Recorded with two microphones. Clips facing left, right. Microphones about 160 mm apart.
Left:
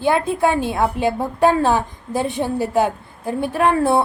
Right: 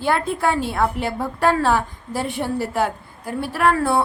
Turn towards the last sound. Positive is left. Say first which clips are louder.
# left 2 dB
turn(degrees=20)  # may be behind; listen again after turning